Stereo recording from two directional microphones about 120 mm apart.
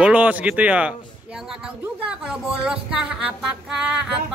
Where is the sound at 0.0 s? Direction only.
10° right (ahead or behind).